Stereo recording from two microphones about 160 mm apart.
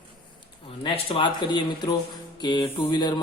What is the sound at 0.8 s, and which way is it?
Speech, 35° left (ahead or behind).